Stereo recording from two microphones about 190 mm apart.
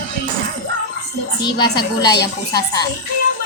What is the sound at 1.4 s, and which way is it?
Speech, 20° left (ahead or behind).